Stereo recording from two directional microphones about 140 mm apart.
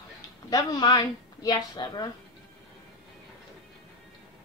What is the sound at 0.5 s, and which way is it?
A woman's voice, 30° left (ahead or behind).